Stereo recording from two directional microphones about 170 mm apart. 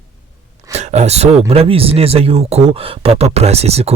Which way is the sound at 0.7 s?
40° right (ahead or behind).